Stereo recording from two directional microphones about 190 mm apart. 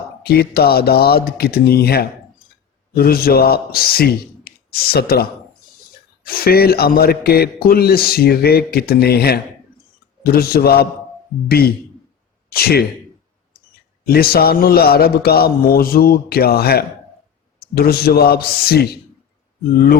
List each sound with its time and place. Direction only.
0.2 s a man's voice: 55° left (ahead or behind)
14.1 s a man's voice: 55° left (ahead or behind)